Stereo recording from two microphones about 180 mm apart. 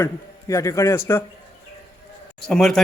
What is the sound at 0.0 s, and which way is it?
A man's voice, 15° left (ahead or behind).